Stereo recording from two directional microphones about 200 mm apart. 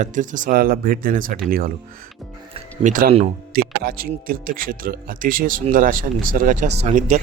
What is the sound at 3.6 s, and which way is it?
Speech, 45° right (ahead or behind).